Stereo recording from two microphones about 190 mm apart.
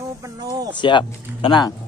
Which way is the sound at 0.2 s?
20° right (ahead or behind).